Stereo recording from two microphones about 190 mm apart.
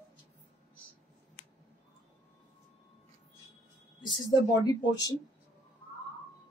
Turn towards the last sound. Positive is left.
turn(degrees=20)  # may be behind; listen again after turning